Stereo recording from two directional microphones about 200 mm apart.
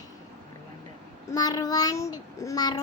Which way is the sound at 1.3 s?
20° left (ahead or behind).